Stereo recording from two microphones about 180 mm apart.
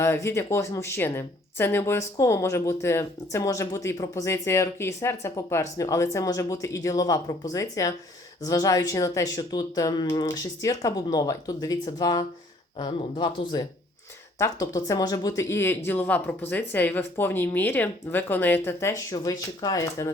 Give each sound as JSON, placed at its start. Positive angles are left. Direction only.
{"t": 0.0, "sound": "a woman's voice", "side_deg": 15}